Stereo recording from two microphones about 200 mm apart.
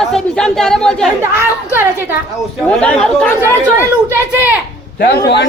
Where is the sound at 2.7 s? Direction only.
5° left (ahead or behind).